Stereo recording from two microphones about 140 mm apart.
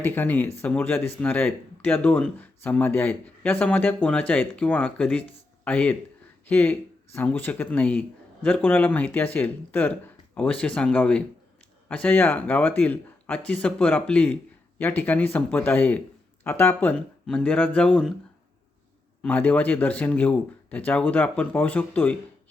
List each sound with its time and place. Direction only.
0.0 s speech: 15° left (ahead or behind)
19.2 s speech: 10° left (ahead or behind)